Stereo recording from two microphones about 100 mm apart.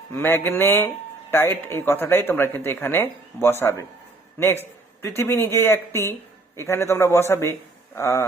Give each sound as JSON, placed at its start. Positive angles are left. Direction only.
{"t": 0.1, "sound": "a man's voice", "side_deg": 25}